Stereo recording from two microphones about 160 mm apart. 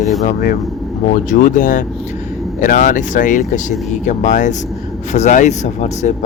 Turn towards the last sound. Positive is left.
turn(degrees=45)  # may be behind; listen again after turning